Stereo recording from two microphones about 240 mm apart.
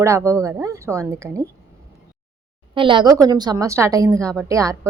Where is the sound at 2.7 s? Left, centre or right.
Right.